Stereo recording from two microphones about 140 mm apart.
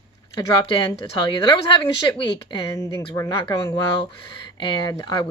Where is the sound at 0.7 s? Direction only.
30° left (ahead or behind).